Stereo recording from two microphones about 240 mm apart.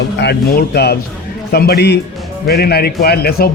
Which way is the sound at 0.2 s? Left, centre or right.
Left.